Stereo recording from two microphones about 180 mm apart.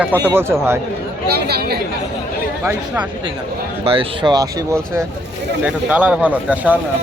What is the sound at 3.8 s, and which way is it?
Speech, 30° right (ahead or behind).